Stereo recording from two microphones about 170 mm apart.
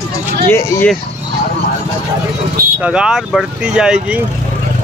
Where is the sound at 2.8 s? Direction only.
5° right (ahead or behind).